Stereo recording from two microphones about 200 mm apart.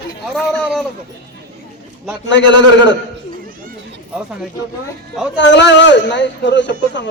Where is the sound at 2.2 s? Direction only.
65° left (ahead or behind).